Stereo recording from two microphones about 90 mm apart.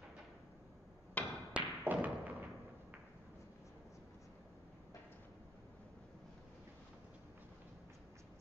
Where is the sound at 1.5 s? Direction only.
15° right (ahead or behind).